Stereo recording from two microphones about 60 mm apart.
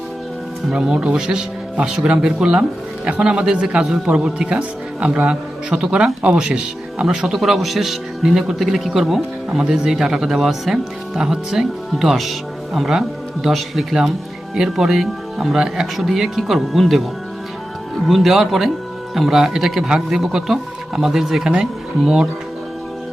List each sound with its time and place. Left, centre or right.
0.7 s speech: centre
7.3 s speech: centre
18.1 s speech: centre